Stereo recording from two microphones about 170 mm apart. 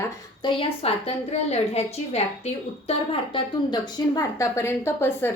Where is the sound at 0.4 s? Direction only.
35° left (ahead or behind).